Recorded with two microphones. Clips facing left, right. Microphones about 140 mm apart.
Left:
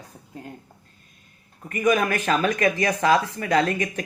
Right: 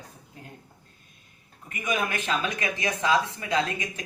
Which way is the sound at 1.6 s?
50° left (ahead or behind).